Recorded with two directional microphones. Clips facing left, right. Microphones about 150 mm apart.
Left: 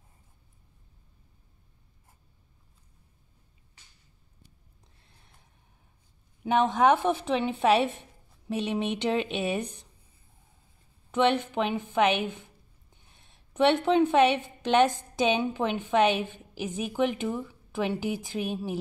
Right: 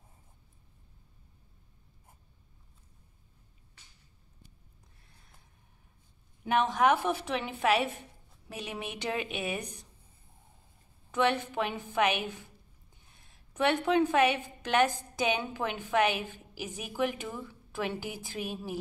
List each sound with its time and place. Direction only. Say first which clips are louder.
6.4 s a woman's voice: left 4 dB; 20° left (ahead or behind)
11.1 s a woman's voice: left 4 dB; 20° left (ahead or behind)
13.5 s a woman's voice: left 5 dB; 25° left (ahead or behind)